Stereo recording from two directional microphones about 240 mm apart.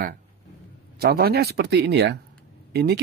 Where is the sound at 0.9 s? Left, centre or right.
Right.